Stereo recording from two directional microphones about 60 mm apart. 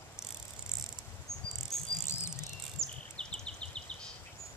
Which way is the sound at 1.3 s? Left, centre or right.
Left.